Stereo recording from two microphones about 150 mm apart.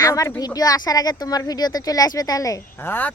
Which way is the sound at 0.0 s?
20° left (ahead or behind).